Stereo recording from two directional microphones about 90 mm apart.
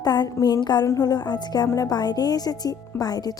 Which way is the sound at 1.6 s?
40° left (ahead or behind).